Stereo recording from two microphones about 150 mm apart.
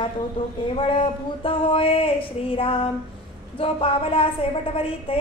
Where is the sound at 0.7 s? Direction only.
35° left (ahead or behind).